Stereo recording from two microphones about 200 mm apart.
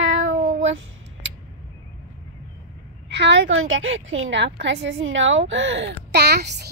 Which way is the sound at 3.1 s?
60° right (ahead or behind).